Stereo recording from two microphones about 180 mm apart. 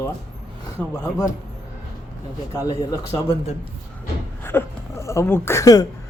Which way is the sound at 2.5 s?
20° left (ahead or behind).